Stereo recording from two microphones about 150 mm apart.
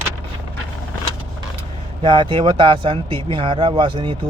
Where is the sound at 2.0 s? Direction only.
30° right (ahead or behind).